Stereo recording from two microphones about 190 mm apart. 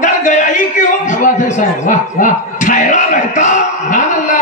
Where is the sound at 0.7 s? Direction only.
40° left (ahead or behind).